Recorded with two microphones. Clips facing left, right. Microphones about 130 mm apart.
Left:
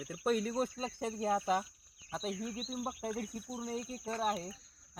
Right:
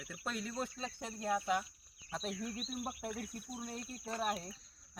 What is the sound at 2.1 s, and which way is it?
Speech, 10° left (ahead or behind).